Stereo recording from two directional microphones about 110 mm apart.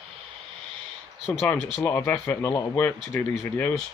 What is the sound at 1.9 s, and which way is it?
Speech, 25° left (ahead or behind).